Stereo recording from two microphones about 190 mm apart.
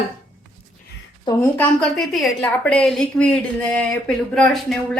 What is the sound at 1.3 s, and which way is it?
Speech, 20° left (ahead or behind).